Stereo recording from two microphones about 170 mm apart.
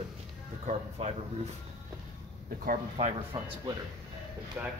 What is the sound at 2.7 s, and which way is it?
Speech, 40° right (ahead or behind).